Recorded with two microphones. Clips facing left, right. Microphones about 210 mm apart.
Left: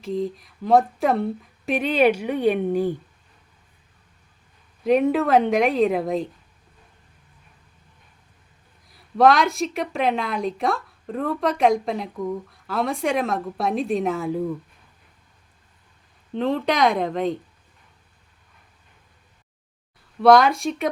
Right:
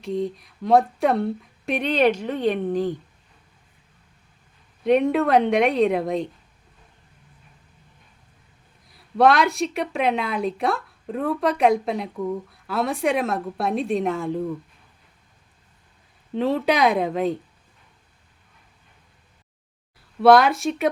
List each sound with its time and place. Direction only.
0.0 s a woman's voice: centre (ahead or behind)
4.8 s a woman's voice: centre (ahead or behind)
9.1 s a woman's voice: centre (ahead or behind)
16.3 s a woman's voice: 5° right (ahead or behind)
20.2 s a woman's voice: 5° right (ahead or behind)